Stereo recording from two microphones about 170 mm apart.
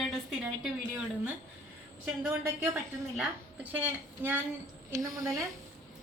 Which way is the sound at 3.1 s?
10° right (ahead or behind).